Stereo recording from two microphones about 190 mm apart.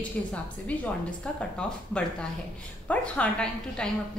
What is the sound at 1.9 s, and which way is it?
A woman's voice, 5° left (ahead or behind).